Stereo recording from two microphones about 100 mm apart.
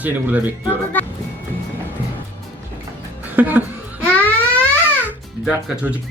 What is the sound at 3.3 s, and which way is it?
Chuckle, 20° right (ahead or behind).